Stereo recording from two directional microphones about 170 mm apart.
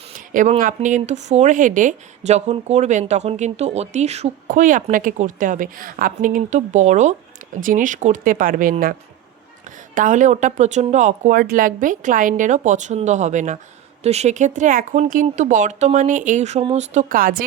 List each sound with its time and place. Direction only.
0.2 s a sound: 50° right (ahead or behind)
0.6 s speech: 45° right (ahead or behind)
9.9 s speech: 50° right (ahead or behind)